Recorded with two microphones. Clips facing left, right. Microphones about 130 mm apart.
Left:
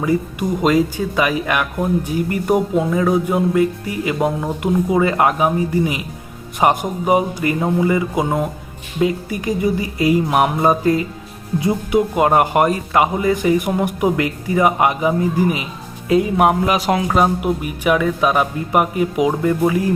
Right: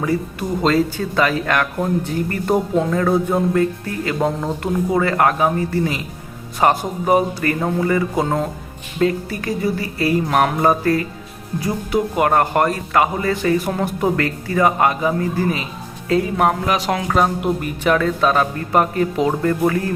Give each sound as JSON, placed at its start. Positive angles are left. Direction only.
{"t": 0.0, "sound": "speech", "side_deg": 15}